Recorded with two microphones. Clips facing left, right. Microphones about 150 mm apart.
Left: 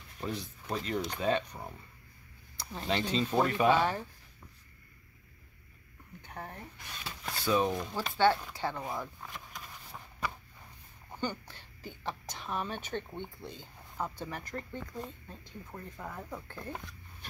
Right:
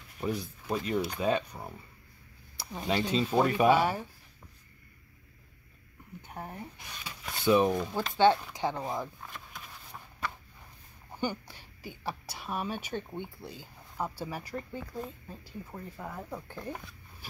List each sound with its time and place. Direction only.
0.2 s speech: 10° right (ahead or behind)
6.2 s speech: 10° right (ahead or behind)
7.1 s a sound: 15° right (ahead or behind)
8.0 s speech: 15° right (ahead or behind)
11.1 s speech: 10° right (ahead or behind)